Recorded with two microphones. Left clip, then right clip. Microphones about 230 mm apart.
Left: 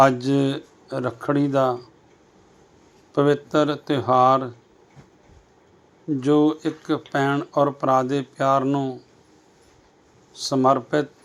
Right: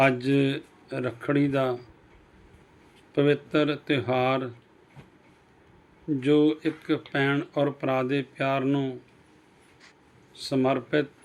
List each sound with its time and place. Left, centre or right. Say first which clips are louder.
0.0 s speech: left 5 dB; centre
3.2 s speech: left 4 dB; centre
6.1 s speech: left 3 dB; centre
10.5 s speech: left 6 dB; centre